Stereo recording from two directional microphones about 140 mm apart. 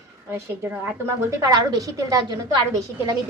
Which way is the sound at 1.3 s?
25° right (ahead or behind).